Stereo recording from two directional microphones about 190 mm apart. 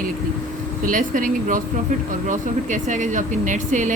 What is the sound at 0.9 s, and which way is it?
Speech, 45° right (ahead or behind).